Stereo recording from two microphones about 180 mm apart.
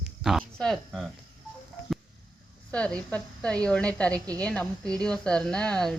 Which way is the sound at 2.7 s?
5° left (ahead or behind).